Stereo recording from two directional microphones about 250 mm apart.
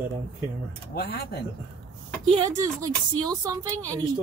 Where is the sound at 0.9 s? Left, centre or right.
Left.